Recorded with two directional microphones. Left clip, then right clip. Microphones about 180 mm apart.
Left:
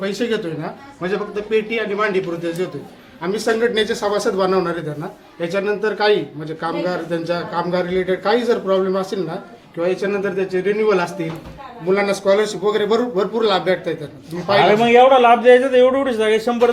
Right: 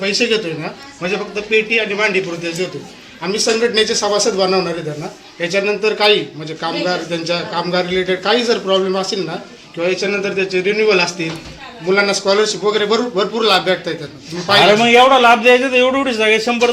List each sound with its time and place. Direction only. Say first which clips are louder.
0.0 s a man's voice: right 5 dB; 15° left (ahead or behind)
14.6 s a man's voice: right 2 dB; 15° right (ahead or behind)